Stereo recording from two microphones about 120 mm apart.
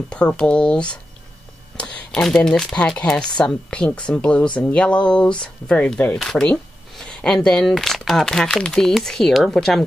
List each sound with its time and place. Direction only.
0.1 s speech: 10° left (ahead or behind)
6.1 s a sound: 5° left (ahead or behind)
7.4 s speech: 5° left (ahead or behind)